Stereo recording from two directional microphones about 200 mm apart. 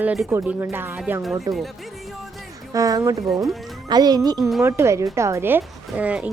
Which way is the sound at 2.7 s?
15° right (ahead or behind).